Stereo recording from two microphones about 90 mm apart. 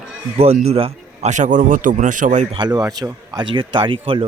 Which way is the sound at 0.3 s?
90° right.